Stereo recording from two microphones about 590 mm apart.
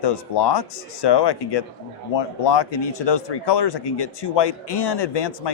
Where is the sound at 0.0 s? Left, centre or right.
Left.